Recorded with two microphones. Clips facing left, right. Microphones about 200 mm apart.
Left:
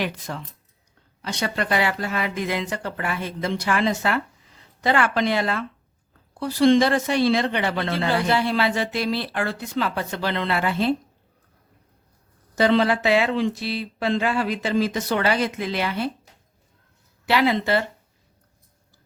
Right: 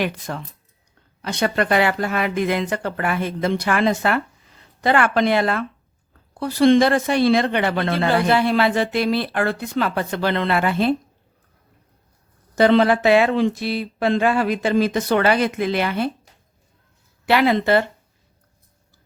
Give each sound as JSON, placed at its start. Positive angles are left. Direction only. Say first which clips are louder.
{"t": 0.0, "sound": "speech", "louder": "right 4 dB", "side_deg": -50}
{"t": 12.5, "sound": "speech", "louder": "right 4 dB", "side_deg": -55}
{"t": 17.2, "sound": "speech", "louder": "right 4 dB", "side_deg": -55}